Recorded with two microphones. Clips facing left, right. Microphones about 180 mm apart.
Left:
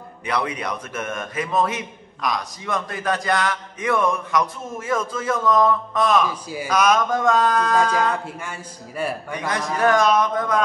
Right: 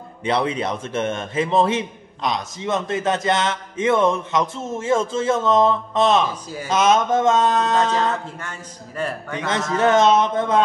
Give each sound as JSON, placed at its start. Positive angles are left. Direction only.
{"t": 0.2, "sound": "a man's voice", "side_deg": -25}
{"t": 8.4, "sound": "a man's voice", "side_deg": 10}
{"t": 9.3, "sound": "a man's voice", "side_deg": -25}